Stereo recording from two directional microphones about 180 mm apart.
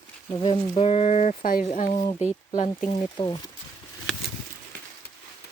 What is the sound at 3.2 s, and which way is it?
Speech, 20° left (ahead or behind).